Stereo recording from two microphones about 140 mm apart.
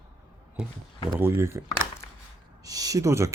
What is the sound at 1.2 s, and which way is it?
Speech, 20° right (ahead or behind).